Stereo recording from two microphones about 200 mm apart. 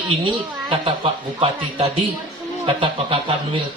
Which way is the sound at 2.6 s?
25° right (ahead or behind).